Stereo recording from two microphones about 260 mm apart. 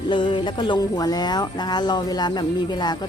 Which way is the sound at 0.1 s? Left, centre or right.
Centre.